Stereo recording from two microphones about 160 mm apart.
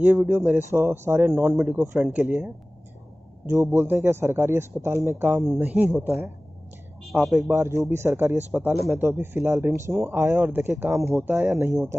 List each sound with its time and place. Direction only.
0.0 s a man's voice: 15° right (ahead or behind)